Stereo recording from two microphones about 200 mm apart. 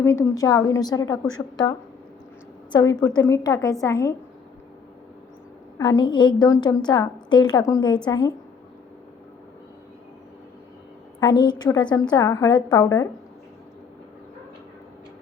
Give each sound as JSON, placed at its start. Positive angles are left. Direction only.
{"t": 0.0, "sound": "a woman's voice", "side_deg": 15}
{"t": 2.7, "sound": "a woman's voice", "side_deg": 20}
{"t": 5.7, "sound": "a woman's voice", "side_deg": 20}
{"t": 11.2, "sound": "a woman's voice", "side_deg": 20}